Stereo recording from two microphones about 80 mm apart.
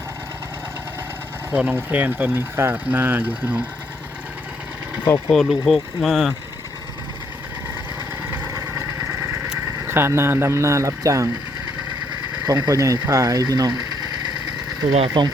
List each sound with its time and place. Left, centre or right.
1.5 s speech: centre
5.3 s speech: centre
8.4 s vehicle: right
9.8 s speech: right
12.5 s speech: right
14.8 s speech: right